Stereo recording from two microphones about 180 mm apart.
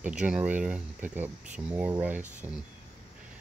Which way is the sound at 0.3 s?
10° right (ahead or behind).